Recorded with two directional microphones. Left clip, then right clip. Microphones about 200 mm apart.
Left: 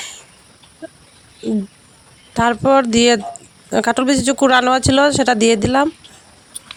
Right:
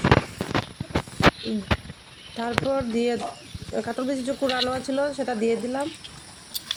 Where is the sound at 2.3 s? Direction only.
60° left (ahead or behind).